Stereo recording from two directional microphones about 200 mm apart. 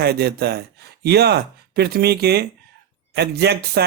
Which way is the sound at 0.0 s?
55° right (ahead or behind).